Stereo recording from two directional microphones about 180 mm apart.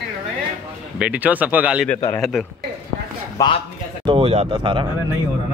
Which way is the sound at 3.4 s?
20° left (ahead or behind).